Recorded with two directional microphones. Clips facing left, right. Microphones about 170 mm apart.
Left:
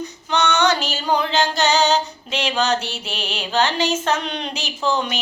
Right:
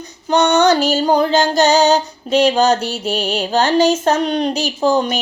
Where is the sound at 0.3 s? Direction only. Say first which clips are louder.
Right 6 dB; 40° right (ahead or behind).